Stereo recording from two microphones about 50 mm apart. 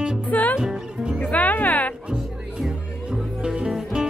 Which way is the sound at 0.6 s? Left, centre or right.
Centre.